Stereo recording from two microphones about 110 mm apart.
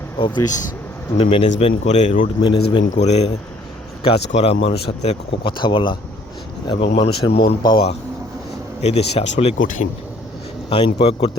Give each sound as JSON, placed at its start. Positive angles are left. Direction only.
{"t": 0.2, "sound": "speech", "side_deg": 40}
{"t": 1.1, "sound": "speech", "side_deg": 75}
{"t": 2.4, "sound": "speech", "side_deg": 45}
{"t": 3.0, "sound": "speech", "side_deg": 75}
{"t": 4.0, "sound": "a man's voice", "side_deg": 65}
{"t": 5.0, "sound": "speech", "side_deg": 75}
{"t": 5.5, "sound": "speech", "side_deg": 50}
{"t": 8.8, "sound": "speech", "side_deg": 65}
{"t": 10.7, "sound": "speech", "side_deg": 55}